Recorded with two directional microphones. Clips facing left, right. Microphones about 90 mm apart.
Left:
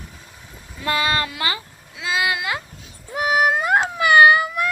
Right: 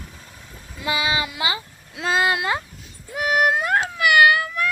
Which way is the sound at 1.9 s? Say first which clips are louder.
Right 3 dB; 45° right (ahead or behind).